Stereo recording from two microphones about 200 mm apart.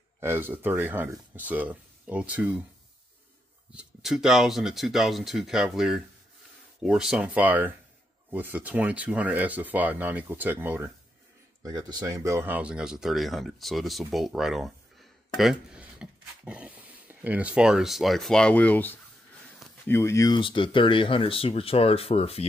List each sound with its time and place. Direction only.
0.2 s speech: 10° right (ahead or behind)
3.7 s speech: centre (ahead or behind); by 22.5 s 30° left (ahead or behind)